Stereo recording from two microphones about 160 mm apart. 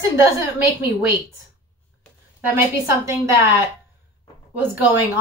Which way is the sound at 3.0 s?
20° right (ahead or behind).